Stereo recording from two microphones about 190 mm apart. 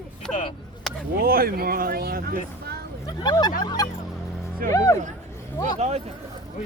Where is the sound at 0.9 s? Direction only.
Centre (ahead or behind).